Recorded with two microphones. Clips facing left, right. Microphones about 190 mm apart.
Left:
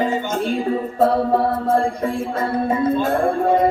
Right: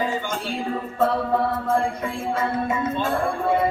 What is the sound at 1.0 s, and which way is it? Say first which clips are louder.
Music: left 4 dB; 35° left (ahead or behind).